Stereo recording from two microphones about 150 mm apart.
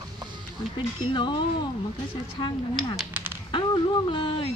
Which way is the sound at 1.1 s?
30° left (ahead or behind).